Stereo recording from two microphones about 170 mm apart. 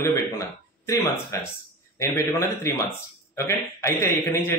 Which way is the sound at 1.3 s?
15° left (ahead or behind).